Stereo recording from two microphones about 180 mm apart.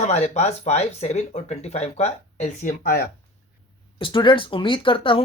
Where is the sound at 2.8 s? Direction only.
60° left (ahead or behind).